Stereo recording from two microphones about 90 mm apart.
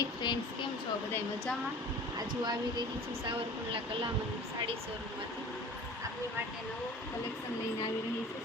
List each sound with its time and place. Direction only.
0.0 s a sound: 55° left (ahead or behind)
2.1 s speech: 50° right (ahead or behind)
3.2 s speech: 80° right